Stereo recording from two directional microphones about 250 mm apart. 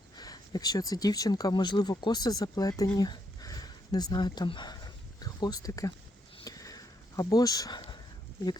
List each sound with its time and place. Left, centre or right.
0.2 s speech: centre
6.4 s sniff: centre
7.2 s speech: centre